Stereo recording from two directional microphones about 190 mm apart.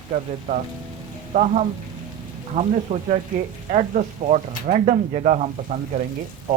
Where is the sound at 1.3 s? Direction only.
40° right (ahead or behind).